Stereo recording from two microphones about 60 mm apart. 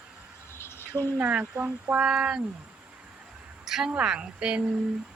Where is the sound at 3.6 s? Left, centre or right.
Centre.